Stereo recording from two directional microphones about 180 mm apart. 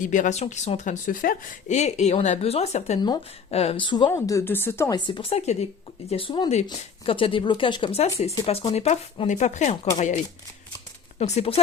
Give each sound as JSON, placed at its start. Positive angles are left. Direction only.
{"t": 0.0, "sound": "speech", "side_deg": 45}
{"t": 4.9, "sound": "speech", "side_deg": 25}
{"t": 11.2, "sound": "speech", "side_deg": 35}